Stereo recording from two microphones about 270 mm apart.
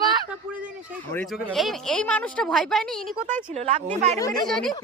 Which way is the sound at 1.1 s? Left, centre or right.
Centre.